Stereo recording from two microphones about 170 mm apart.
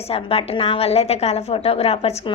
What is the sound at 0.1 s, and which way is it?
A woman's voice, 35° left (ahead or behind).